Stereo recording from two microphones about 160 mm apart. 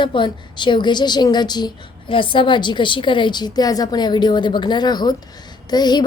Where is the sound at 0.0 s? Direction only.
30° left (ahead or behind).